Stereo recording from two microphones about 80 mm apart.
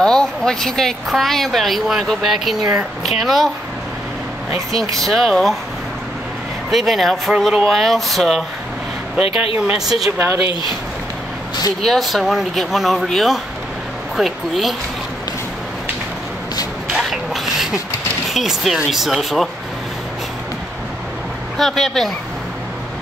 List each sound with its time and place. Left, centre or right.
0.0 s a woman's voice: centre
5.0 s a woman's voice: centre
6.7 s a woman's voice: centre
9.1 s speech: centre
10.1 s a woman's voice: right
11.8 s a woman's voice: centre
16.9 s a sound: centre
18.3 s a woman's voice: centre
21.5 s a woman's voice: centre